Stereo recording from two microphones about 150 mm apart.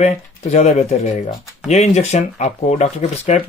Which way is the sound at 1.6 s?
50° left (ahead or behind).